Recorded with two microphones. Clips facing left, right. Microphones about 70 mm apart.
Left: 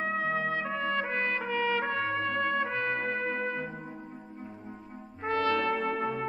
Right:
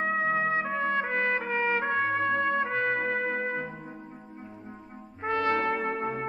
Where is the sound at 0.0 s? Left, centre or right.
Right.